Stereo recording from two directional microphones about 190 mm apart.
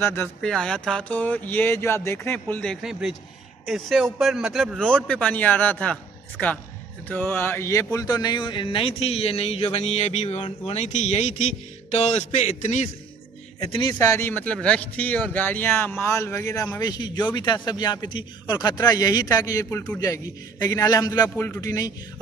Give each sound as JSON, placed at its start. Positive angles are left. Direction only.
{"t": 0.0, "sound": "a man's voice", "side_deg": 10}
{"t": 5.0, "sound": "a man's voice", "side_deg": 5}
{"t": 13.6, "sound": "a man's voice", "side_deg": 25}